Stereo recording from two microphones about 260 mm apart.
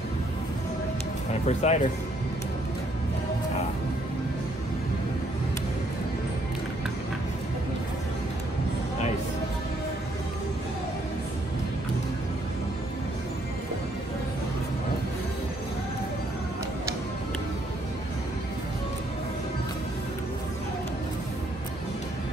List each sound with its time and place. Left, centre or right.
1.5 s speech: left